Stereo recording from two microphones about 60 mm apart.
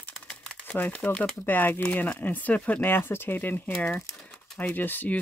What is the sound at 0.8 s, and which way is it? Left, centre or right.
Speech, left.